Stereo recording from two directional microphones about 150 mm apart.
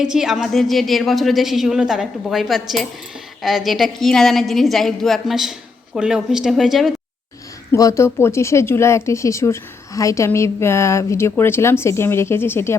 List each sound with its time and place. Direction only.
0.0 s a woman's voice: 5° right (ahead or behind)
7.7 s a woman's voice: 20° left (ahead or behind)